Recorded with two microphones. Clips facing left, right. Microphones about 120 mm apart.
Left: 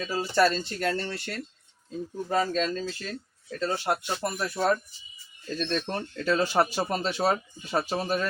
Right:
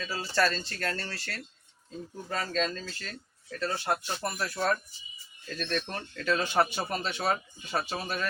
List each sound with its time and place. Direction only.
0.0 s speech: 20° left (ahead or behind)